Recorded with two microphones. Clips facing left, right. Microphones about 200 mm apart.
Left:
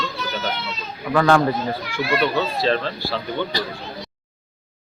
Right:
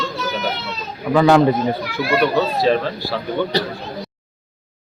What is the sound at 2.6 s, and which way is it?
Speech, 10° right (ahead or behind).